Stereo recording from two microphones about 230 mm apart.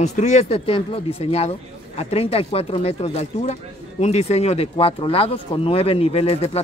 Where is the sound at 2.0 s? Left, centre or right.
Left.